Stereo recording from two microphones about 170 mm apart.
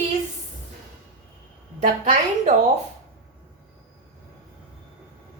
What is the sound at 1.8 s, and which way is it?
Speech, 45° right (ahead or behind).